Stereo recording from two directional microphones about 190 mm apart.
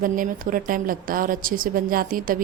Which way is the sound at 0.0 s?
45° right (ahead or behind).